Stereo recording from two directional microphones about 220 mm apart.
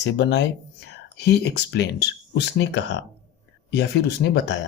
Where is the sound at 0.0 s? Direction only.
50° left (ahead or behind).